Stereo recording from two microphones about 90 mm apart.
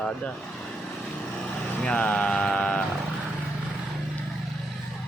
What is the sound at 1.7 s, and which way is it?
Vehicle, 10° left (ahead or behind).